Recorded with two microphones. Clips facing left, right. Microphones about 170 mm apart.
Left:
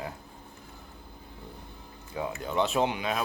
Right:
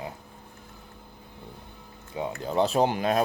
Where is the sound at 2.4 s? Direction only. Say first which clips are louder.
Right 4 dB; 35° right (ahead or behind).